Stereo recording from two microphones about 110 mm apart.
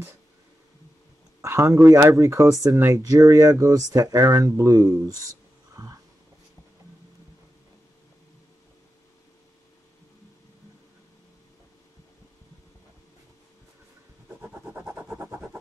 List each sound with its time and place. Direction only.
1.4 s speech: 25° right (ahead or behind)
5.8 s wheeze: 35° right (ahead or behind)
14.5 s a sound: 10° right (ahead or behind)